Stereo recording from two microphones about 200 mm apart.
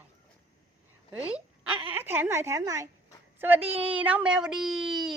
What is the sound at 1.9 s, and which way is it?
A woman's voice, 10° right (ahead or behind).